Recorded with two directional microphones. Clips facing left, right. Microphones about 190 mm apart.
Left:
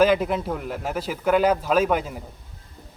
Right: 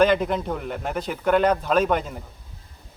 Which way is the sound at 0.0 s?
5° left (ahead or behind).